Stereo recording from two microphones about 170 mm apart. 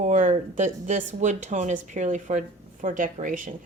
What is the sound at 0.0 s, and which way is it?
A woman's voice, 45° right (ahead or behind).